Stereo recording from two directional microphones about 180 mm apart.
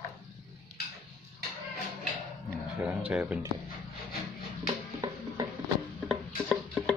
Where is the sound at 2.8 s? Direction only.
5° right (ahead or behind).